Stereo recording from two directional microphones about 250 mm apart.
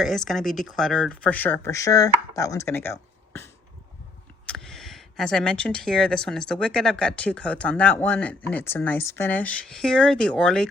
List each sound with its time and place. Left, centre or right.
0.0 s speech: centre
4.4 s speech: centre